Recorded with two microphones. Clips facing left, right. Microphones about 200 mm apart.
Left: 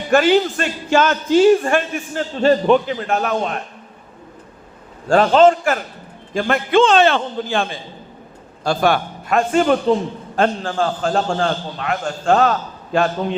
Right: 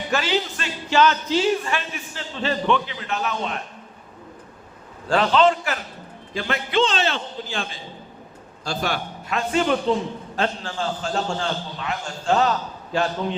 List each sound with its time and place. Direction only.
0.1 s a man's voice: 50° left (ahead or behind)
5.0 s a man's voice: 45° left (ahead or behind)